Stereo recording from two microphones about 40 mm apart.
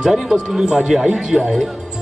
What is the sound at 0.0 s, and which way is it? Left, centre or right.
A man's voice, centre.